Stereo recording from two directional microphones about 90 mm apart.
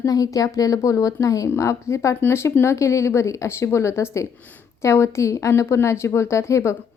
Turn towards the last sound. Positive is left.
turn(degrees=35)  # may be behind; listen again after turning